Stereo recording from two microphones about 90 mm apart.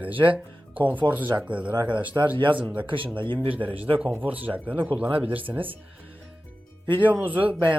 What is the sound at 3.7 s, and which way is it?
Speech, 90° right.